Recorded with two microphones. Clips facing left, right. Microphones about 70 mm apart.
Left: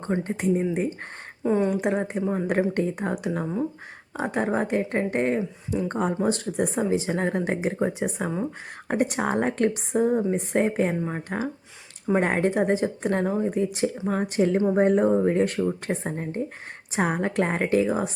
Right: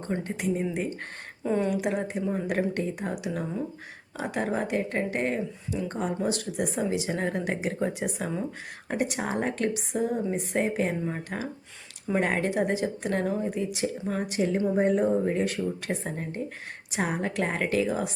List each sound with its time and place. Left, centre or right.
1.5 s speech: centre
1.7 s speech: left
8.9 s speech: left
14.1 s a woman's voice: left